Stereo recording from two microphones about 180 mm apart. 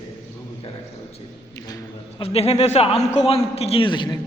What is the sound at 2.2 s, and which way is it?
A man's voice, 35° left (ahead or behind).